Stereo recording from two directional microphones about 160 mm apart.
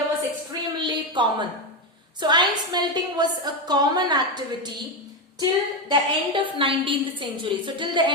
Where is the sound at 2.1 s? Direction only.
25° right (ahead or behind).